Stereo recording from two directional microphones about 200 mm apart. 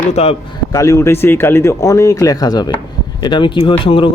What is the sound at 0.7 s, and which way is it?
A man's voice, 15° left (ahead or behind).